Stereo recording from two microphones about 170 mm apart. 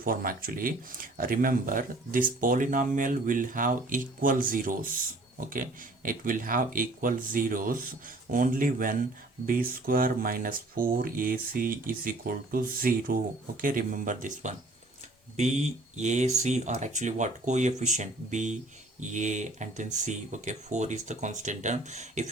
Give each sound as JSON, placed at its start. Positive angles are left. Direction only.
{"t": 0.0, "sound": "speech", "side_deg": -55}